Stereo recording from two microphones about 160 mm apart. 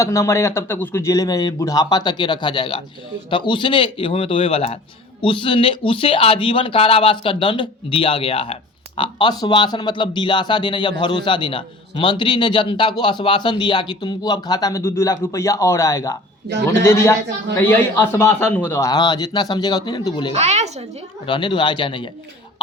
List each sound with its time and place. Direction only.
0.0 s a man's voice: 20° left (ahead or behind)
20.3 s speech: 45° right (ahead or behind)
21.2 s speech: 30° left (ahead or behind)